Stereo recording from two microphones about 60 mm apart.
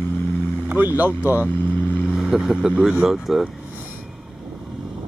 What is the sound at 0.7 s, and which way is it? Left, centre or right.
Boat, right.